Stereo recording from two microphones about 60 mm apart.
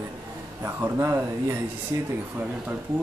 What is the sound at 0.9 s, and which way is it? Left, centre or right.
Speech, right.